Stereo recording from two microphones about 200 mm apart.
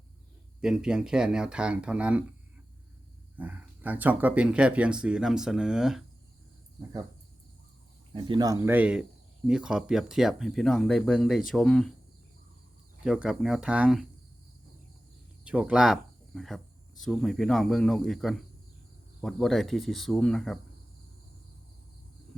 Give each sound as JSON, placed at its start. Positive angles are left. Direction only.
{"t": 0.6, "sound": "speech", "side_deg": -5}
{"t": 3.3, "sound": "speech", "side_deg": -10}
{"t": 8.1, "sound": "speech", "side_deg": -20}
{"t": 13.1, "sound": "speech", "side_deg": -5}
{"t": 15.4, "sound": "speech", "side_deg": -5}